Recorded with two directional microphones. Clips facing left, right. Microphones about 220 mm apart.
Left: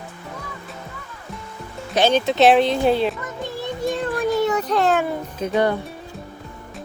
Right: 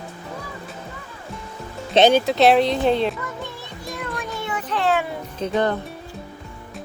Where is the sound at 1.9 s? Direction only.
20° right (ahead or behind).